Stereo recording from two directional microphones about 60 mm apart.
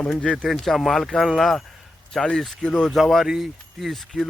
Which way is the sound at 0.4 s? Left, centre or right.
Centre.